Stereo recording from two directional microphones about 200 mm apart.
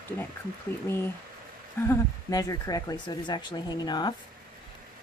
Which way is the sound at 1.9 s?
15° left (ahead or behind).